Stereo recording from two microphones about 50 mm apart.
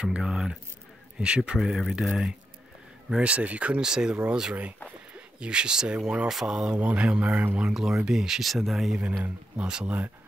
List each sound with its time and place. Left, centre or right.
0.0 s speech: centre
1.6 s speech: centre
3.2 s speech: right
3.8 s speech: centre
7.7 s speech: centre
9.6 s speech: centre